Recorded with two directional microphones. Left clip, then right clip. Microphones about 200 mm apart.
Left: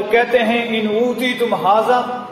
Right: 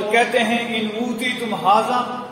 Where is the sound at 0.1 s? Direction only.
20° left (ahead or behind).